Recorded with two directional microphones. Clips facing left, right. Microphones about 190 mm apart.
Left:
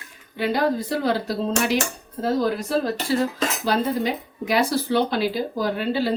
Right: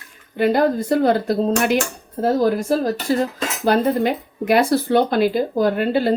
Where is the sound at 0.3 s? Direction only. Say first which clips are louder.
Right 5 dB; 50° right (ahead or behind).